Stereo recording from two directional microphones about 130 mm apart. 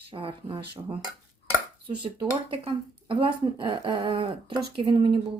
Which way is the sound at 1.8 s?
40° right (ahead or behind).